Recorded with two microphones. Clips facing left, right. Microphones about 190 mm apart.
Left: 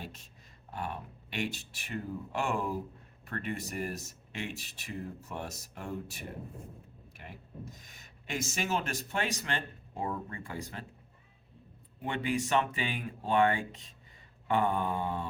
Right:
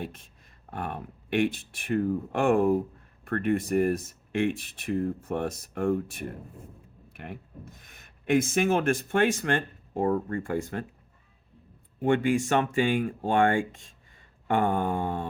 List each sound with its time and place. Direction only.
0.0 s speech: 55° right (ahead or behind)
12.0 s speech: 50° right (ahead or behind)